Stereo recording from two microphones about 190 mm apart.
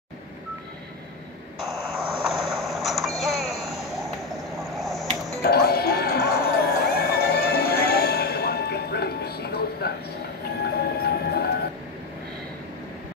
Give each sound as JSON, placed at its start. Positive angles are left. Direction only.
{"t": 1.6, "sound": "vehicle", "side_deg": 0}
{"t": 5.4, "sound": "music", "side_deg": 60}